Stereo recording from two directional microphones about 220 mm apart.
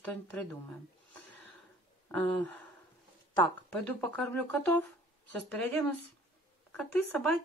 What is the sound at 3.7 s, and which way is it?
Speech, 5° left (ahead or behind).